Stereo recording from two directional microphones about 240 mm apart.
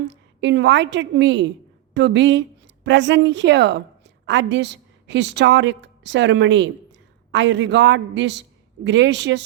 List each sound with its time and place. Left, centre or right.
0.1 s a woman's voice: right